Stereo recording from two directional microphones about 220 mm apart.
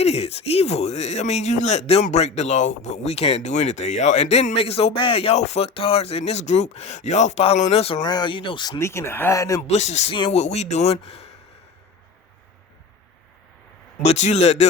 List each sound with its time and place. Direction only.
0.0 s speech: 30° left (ahead or behind)
9.6 s speech: 30° left (ahead or behind)
14.0 s a man's voice: 30° left (ahead or behind)